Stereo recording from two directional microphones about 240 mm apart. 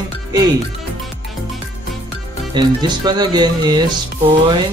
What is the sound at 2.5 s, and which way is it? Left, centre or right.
Speech, centre.